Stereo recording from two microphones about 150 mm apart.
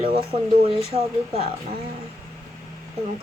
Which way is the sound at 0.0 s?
35° right (ahead or behind).